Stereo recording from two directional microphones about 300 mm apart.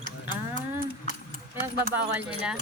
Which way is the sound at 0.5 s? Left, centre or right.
Right.